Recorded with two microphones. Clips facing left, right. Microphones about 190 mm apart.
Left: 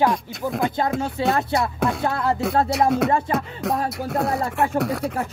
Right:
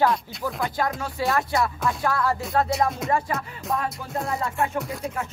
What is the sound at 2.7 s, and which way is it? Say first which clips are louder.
Speech: left 6 dB; 70° left (ahead or behind).